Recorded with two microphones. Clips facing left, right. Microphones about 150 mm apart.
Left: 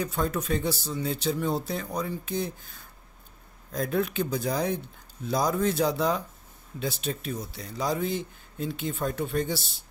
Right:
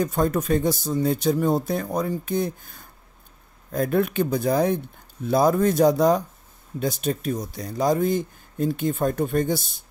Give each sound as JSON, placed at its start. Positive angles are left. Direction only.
{"t": 0.0, "sound": "speech", "side_deg": -45}